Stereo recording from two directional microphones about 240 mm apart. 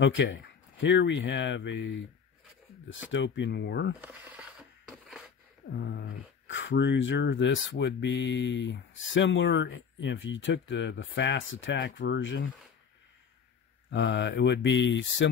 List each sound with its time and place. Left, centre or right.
0.0 s speech: left
3.1 s speech: left
4.0 s a sound: centre
5.7 s speech: left
13.8 s speech: left